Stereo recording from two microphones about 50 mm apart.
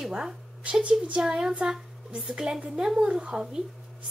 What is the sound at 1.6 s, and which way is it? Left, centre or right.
A child's voice, right.